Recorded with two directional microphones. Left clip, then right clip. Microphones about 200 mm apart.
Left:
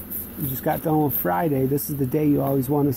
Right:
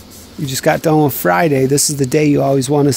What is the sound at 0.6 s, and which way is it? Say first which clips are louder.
Speech: right 10 dB; 50° right (ahead or behind).